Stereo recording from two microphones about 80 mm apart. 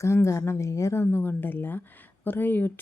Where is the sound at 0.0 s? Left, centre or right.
Left.